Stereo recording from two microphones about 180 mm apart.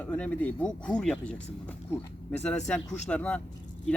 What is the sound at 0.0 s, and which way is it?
Speech, 10° left (ahead or behind).